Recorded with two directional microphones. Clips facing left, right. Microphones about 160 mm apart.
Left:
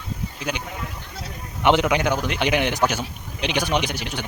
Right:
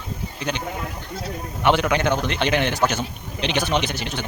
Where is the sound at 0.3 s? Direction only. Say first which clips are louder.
Right 2 dB; 10° left (ahead or behind).